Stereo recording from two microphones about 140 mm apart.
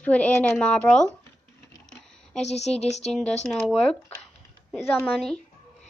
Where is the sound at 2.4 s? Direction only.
50° left (ahead or behind).